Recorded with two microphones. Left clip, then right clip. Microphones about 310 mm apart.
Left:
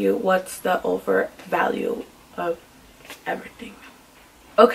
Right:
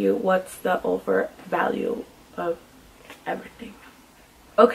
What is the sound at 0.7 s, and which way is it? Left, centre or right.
Speech, centre.